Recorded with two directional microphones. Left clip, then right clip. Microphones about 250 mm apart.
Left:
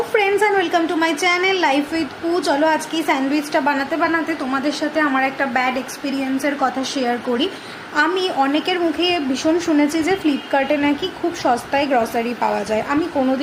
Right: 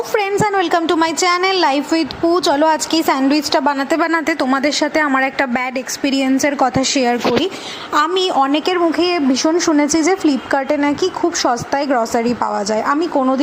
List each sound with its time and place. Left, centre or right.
0.1 s a woman's voice: right